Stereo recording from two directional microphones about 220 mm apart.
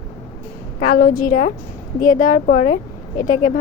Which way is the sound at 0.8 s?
40° left (ahead or behind).